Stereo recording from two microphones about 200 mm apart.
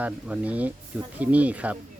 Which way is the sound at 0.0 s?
5° right (ahead or behind).